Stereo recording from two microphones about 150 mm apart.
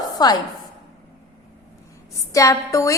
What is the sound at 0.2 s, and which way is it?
Speech, 25° left (ahead or behind).